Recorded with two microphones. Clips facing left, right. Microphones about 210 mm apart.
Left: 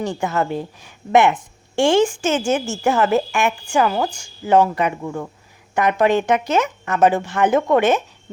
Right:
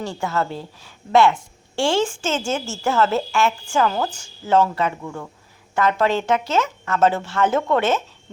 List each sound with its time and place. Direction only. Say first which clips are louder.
0.0 s a woman's voice: left 3 dB; 15° left (ahead or behind)